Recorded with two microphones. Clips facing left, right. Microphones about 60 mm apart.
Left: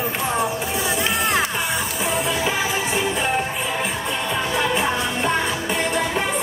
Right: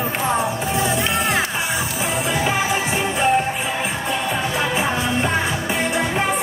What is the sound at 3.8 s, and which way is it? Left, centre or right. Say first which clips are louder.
Music: right 2 dB; centre.